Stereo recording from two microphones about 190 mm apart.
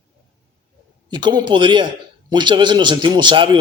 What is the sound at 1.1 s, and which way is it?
Speech, 25° right (ahead or behind).